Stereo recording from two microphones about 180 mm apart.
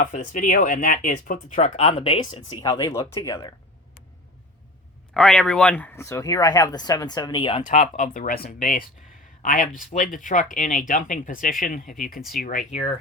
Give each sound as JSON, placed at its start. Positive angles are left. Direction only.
{"t": 0.0, "sound": "speech", "side_deg": 45}
{"t": 5.1, "sound": "speech", "side_deg": 5}
{"t": 7.8, "sound": "speech", "side_deg": 45}